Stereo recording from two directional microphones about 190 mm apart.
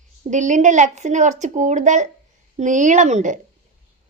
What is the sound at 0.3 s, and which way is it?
Speech, 40° right (ahead or behind).